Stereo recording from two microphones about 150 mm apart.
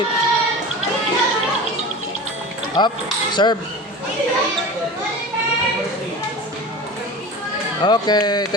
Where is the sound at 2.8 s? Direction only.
30° left (ahead or behind).